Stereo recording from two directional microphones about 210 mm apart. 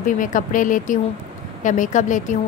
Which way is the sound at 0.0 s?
40° left (ahead or behind).